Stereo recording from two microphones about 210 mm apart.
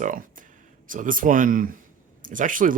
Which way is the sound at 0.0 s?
40° right (ahead or behind).